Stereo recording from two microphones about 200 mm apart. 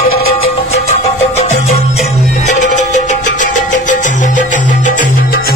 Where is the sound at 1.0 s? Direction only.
35° left (ahead or behind); by 5.5 s 50° left (ahead or behind).